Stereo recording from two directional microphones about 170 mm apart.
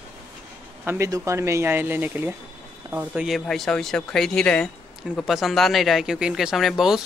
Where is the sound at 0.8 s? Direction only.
15° right (ahead or behind).